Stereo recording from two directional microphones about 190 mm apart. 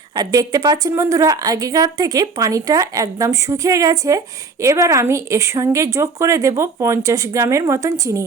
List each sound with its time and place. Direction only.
0.1 s a woman's voice: 20° right (ahead or behind)